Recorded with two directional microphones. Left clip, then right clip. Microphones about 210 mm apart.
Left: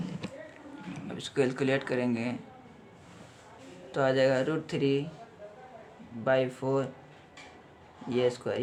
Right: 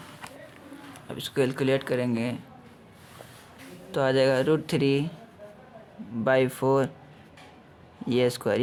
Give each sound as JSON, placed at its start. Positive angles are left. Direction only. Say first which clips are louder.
{"t": 0.9, "sound": "speech", "louder": "right 3 dB", "side_deg": -30}
{"t": 3.9, "sound": "speech", "louder": "right 3 dB", "side_deg": -35}
{"t": 6.2, "sound": "speech", "louder": "right 5 dB", "side_deg": -40}
{"t": 8.1, "sound": "speech", "louder": "right 4 dB", "side_deg": -40}